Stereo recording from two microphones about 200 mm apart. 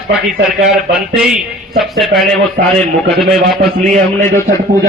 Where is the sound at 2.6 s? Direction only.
55° right (ahead or behind).